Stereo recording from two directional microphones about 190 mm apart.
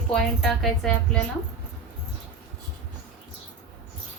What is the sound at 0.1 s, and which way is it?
A woman's voice, centre (ahead or behind).